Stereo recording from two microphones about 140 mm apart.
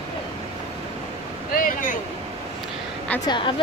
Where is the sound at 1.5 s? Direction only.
80° left.